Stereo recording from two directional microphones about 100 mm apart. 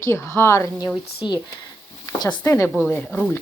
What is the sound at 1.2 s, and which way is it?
Speech, 50° left (ahead or behind).